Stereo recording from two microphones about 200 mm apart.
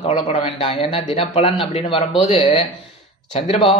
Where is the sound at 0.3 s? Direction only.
30° left (ahead or behind).